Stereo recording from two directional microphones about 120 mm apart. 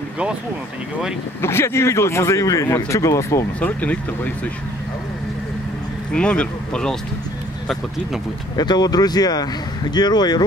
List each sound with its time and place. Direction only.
1.4 s a man's voice: 20° left (ahead or behind)
3.5 s speech: 10° left (ahead or behind)
6.1 s speech: 10° left (ahead or behind)
8.5 s speech: 35° left (ahead or behind)